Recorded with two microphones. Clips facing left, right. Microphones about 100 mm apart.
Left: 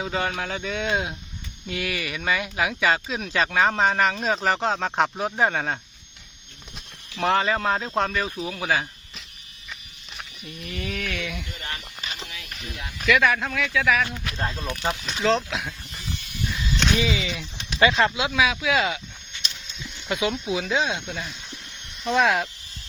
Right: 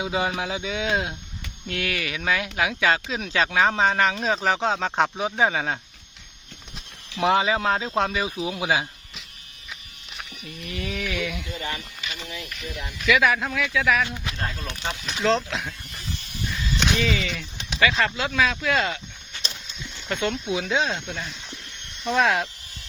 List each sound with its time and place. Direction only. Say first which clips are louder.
0.0 s speech: right 1 dB; 10° right (ahead or behind)
10.2 s speech: right 1 dB; centre (ahead or behind)
12.0 s a sound: right 2 dB; 40° left (ahead or behind)
13.1 s speech: even; centre (ahead or behind)
14.3 s speech: left 4 dB; 20° left (ahead or behind)
15.0 s speech: right 1 dB; centre (ahead or behind)
16.5 s a sound: right 1 dB; centre (ahead or behind)
17.0 s speech: even; 10° left (ahead or behind)
17.7 s speech: left 3 dB; 25° left (ahead or behind)
18.1 s speech: left 1 dB; 10° left (ahead or behind)
20.1 s speech: left 1 dB; 5° left (ahead or behind)